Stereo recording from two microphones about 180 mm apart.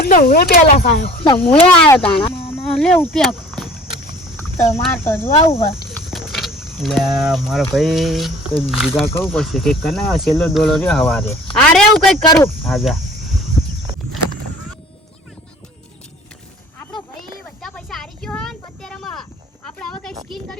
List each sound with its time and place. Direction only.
0.0 s speech: 55° left (ahead or behind)
1.0 s speech: 30° left (ahead or behind)
1.5 s speech: 10° left (ahead or behind)
4.4 s a sound: 15° left (ahead or behind)
5.0 s speech: 10° left (ahead or behind)
5.4 s speech: 30° left (ahead or behind)
5.9 s speech: centre (ahead or behind)
9.0 s a woman's voice: 10° left (ahead or behind)
12.2 s speech: 20° left (ahead or behind)
12.6 s cricket: centre (ahead or behind)
17.6 s a sound: centre (ahead or behind)